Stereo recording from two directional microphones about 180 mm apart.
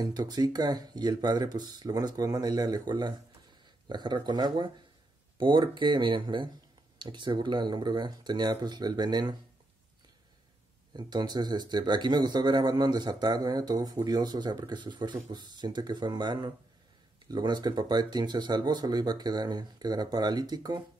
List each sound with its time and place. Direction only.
0.0 s speech: 20° right (ahead or behind)
10.9 s speech: 25° right (ahead or behind)